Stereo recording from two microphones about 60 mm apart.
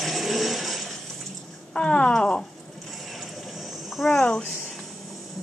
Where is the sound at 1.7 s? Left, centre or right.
Centre.